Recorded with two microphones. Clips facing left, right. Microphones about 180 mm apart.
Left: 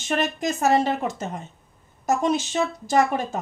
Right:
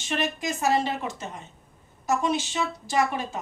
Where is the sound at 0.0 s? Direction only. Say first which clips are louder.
Left 4 dB; 45° left (ahead or behind).